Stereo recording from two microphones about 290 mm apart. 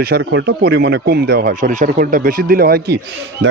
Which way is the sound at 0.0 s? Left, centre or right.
Right.